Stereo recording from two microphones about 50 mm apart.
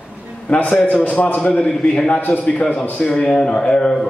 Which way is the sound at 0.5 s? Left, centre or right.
Left.